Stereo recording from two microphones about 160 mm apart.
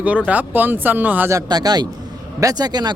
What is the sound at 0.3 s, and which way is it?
Speech, 10° right (ahead or behind).